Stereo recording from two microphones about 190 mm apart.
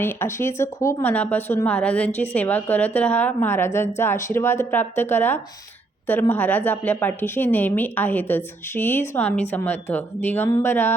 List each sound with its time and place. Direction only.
0.0 s speech: 15° left (ahead or behind)